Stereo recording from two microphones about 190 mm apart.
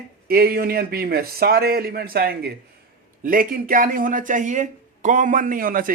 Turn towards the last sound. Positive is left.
turn(degrees=-45)  # may be behind; listen again after turning